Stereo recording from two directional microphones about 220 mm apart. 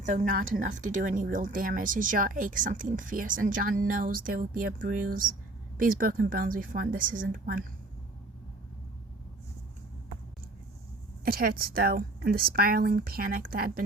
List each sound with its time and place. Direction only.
0.0 s a woman's voice: 35° right (ahead or behind)
11.3 s speech: 45° right (ahead or behind)